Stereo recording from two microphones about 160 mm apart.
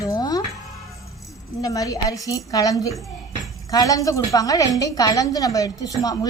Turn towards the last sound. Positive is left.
turn(degrees=25)  # may be behind; listen again after turning